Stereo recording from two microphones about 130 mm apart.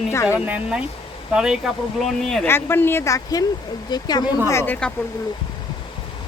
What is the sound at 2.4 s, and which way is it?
Speech, 15° left (ahead or behind).